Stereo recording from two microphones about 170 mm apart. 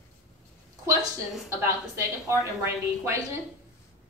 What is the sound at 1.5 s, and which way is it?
Speech, 15° right (ahead or behind).